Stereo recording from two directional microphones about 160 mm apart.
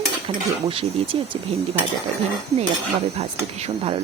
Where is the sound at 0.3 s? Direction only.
35° right (ahead or behind).